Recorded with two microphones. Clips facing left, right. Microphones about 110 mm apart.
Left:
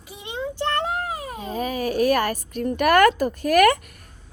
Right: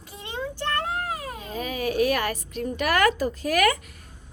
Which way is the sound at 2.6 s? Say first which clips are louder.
Left 6 dB; 50° left (ahead or behind).